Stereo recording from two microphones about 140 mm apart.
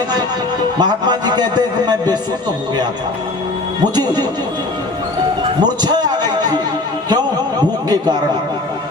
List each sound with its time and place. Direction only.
0.8 s a man's voice: 30° right (ahead or behind)
3.9 s a man's voice: 30° right (ahead or behind)
5.4 s a man's voice: 30° right (ahead or behind)
7.1 s a sound: 30° right (ahead or behind)